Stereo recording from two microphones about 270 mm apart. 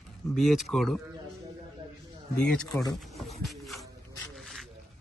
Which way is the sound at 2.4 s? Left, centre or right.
Centre.